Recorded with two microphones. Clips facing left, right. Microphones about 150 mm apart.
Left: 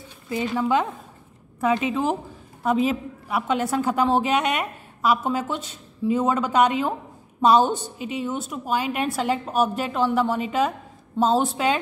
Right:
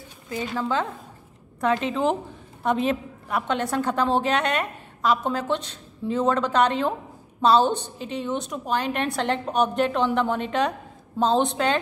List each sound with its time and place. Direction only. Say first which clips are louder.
0.3 s a woman's voice: left 4 dB; 20° left (ahead or behind)